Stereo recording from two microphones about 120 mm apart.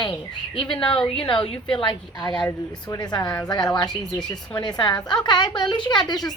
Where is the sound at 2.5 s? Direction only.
30° left (ahead or behind).